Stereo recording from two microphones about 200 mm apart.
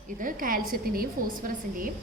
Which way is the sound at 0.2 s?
45° right (ahead or behind).